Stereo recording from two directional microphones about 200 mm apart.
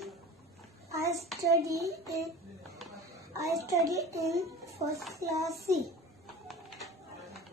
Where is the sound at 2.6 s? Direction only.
Centre (ahead or behind).